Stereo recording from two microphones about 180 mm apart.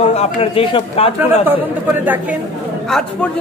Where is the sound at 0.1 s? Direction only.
35° left (ahead or behind).